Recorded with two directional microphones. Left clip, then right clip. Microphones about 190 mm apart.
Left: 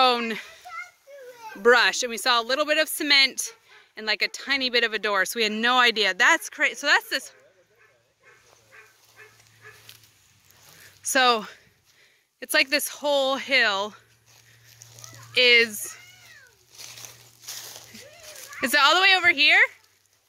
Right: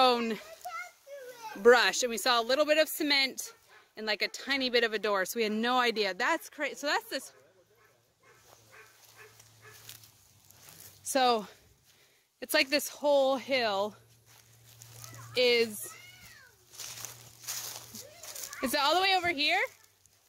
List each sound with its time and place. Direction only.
0.0 s a sound: centre (ahead or behind)
1.6 s speech: centre (ahead or behind)
11.1 s speech: centre (ahead or behind)
15.3 s speech: centre (ahead or behind)
16.7 s a sound: 5° left (ahead or behind)
18.6 s speech: centre (ahead or behind)